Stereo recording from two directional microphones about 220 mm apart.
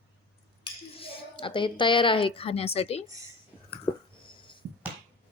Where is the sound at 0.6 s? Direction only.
25° left (ahead or behind).